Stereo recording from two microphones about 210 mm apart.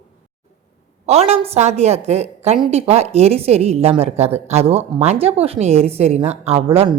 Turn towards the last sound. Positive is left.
turn(degrees=-25)  # may be behind; listen again after turning